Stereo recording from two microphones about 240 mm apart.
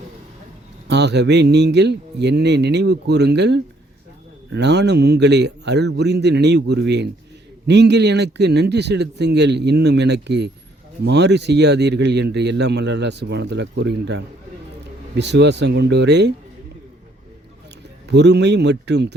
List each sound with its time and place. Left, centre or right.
0.9 s speech: right
18.1 s speech: right